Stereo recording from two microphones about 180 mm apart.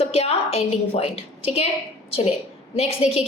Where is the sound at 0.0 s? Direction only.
35° left (ahead or behind).